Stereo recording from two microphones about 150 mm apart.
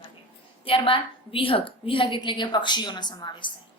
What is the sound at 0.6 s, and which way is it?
A woman's voice, 35° left (ahead or behind).